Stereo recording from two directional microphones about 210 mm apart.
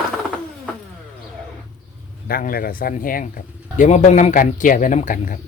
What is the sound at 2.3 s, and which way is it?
Speech, 45° left (ahead or behind).